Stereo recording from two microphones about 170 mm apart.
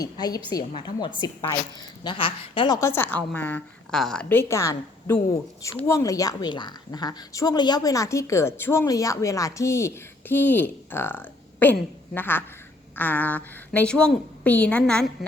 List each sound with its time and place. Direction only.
0.0 s speech: 20° left (ahead or behind)
2.8 s speech: 15° left (ahead or behind)